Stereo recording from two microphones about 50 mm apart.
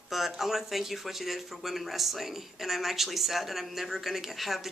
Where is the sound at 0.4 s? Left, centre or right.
Centre.